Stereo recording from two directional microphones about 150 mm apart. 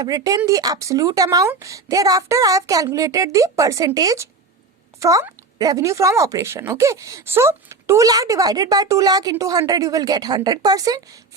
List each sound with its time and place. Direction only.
0.0 s speech: 25° right (ahead or behind)